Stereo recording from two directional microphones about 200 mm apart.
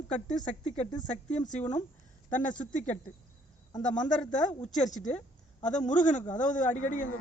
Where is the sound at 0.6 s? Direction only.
30° left (ahead or behind).